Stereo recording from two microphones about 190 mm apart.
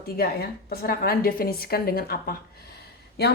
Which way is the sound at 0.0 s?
50° left (ahead or behind).